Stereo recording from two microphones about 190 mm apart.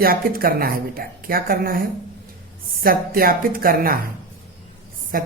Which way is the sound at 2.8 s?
50° right (ahead or behind).